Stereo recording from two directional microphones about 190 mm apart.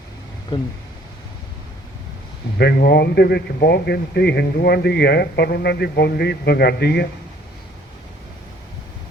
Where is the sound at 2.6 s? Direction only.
55° left (ahead or behind).